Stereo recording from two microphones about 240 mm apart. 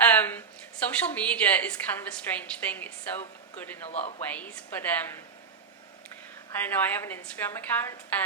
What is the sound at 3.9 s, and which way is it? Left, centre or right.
Speech, left.